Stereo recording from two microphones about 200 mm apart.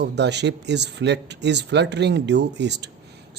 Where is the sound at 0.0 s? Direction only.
60° right (ahead or behind).